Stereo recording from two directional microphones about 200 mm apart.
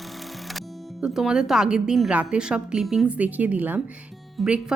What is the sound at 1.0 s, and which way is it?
Speech, 5° right (ahead or behind).